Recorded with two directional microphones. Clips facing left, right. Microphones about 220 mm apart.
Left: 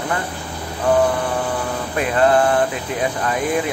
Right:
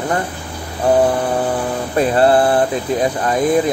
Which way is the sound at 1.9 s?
35° right (ahead or behind).